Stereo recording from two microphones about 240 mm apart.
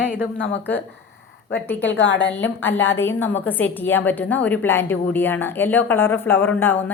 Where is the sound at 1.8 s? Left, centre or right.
Left.